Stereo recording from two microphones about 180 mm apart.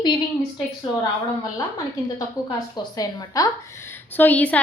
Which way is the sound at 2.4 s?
20° left (ahead or behind).